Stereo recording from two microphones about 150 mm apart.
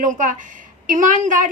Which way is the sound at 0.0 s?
55° right (ahead or behind).